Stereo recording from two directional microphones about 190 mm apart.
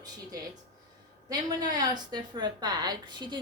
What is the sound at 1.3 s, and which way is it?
A woman's voice, 20° right (ahead or behind).